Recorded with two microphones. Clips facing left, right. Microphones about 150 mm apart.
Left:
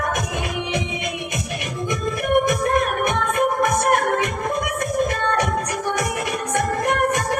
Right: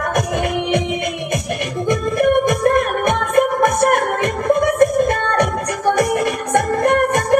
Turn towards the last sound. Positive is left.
turn(degrees=-55)  # may be behind; listen again after turning